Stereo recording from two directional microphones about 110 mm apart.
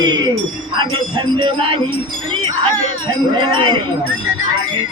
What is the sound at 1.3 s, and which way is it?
Music, 55° right (ahead or behind).